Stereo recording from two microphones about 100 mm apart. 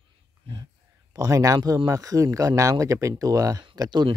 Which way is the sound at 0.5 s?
70° right (ahead or behind).